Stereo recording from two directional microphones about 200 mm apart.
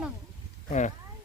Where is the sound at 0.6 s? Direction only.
40° left (ahead or behind).